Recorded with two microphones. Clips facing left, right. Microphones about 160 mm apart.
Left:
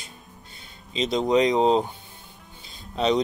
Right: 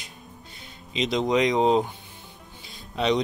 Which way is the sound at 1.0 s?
30° left (ahead or behind).